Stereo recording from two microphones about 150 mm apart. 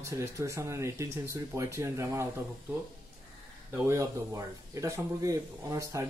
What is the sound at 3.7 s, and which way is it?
Speech, 20° right (ahead or behind).